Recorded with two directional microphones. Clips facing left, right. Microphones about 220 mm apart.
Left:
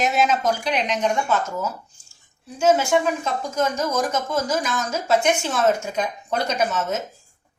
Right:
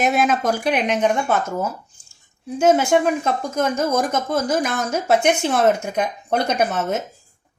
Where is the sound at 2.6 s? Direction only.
55° right (ahead or behind).